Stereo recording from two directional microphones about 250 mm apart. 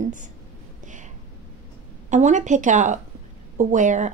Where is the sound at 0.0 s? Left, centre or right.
Right.